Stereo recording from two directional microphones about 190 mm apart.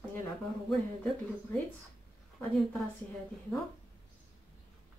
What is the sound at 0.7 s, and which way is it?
Speech, centre (ahead or behind).